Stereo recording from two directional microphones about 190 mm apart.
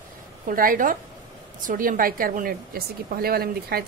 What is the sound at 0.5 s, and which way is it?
Speech, 45° right (ahead or behind).